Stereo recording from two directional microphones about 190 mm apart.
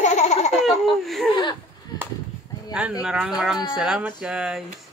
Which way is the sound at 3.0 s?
5° right (ahead or behind).